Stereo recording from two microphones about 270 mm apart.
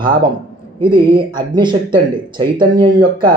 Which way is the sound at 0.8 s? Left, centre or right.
Centre.